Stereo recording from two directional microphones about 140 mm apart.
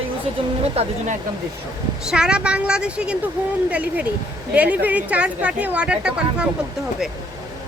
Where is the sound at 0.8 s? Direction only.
45° right (ahead or behind).